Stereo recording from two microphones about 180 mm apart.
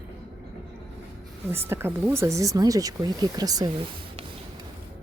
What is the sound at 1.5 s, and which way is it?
Speech, 15° right (ahead or behind).